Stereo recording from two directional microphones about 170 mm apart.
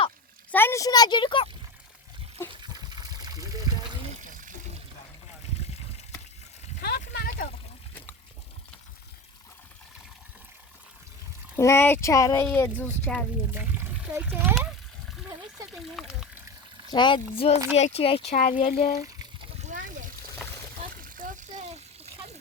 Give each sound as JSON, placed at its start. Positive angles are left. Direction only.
{"t": 0.5, "sound": "speech", "side_deg": 15}
{"t": 2.5, "sound": "water", "side_deg": -25}
{"t": 6.8, "sound": "a sound", "side_deg": 70}
{"t": 11.5, "sound": "speech", "side_deg": 15}
{"t": 13.1, "sound": "speech", "side_deg": -10}
{"t": 15.7, "sound": "speech", "side_deg": 0}
{"t": 16.9, "sound": "speech", "side_deg": 30}
{"t": 19.5, "sound": "splash", "side_deg": -45}
{"t": 20.9, "sound": "water", "side_deg": -50}